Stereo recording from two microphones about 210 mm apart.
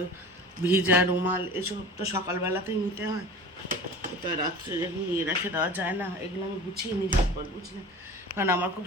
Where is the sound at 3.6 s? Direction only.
40° right (ahead or behind).